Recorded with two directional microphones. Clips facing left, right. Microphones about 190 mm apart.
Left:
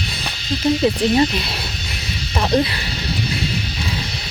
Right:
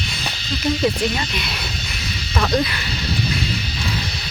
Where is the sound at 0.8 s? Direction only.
30° left (ahead or behind).